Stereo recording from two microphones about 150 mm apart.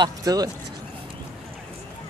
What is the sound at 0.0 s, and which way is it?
Speech, 25° right (ahead or behind).